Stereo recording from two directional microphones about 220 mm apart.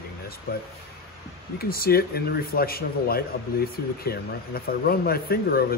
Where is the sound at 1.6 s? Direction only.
45° left (ahead or behind).